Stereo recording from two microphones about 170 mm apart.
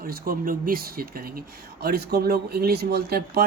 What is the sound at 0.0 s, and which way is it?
Speech, 60° right (ahead or behind).